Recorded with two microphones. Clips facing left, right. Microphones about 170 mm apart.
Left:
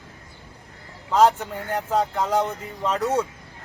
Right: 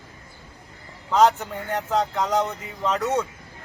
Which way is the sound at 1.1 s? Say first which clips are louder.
Even; 10° left (ahead or behind).